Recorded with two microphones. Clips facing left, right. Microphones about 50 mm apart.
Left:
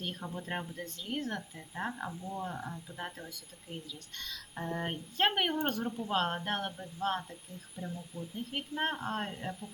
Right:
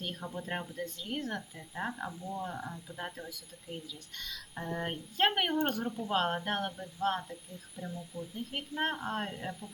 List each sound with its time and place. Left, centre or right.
0.0 s a woman's voice: centre
7.8 s speech: left
8.4 s a woman's voice: centre